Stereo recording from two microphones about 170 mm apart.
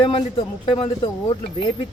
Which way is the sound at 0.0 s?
30° left (ahead or behind).